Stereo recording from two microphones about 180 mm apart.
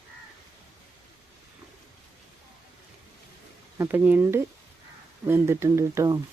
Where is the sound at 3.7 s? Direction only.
10° right (ahead or behind).